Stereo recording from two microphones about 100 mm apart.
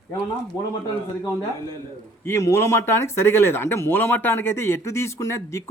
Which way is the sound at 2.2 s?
25° left (ahead or behind).